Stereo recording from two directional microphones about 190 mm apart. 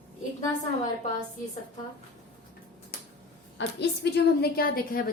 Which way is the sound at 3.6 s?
60° left (ahead or behind).